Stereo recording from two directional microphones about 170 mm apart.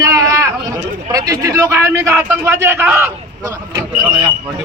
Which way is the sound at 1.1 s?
20° right (ahead or behind).